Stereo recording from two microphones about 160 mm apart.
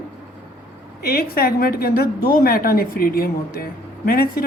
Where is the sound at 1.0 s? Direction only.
70° left (ahead or behind).